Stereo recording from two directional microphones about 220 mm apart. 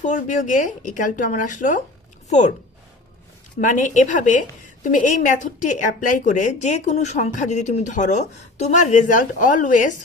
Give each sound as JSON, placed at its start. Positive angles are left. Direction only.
{"t": 0.0, "sound": "a woman's voice", "side_deg": 35}
{"t": 3.6, "sound": "a woman's voice", "side_deg": 35}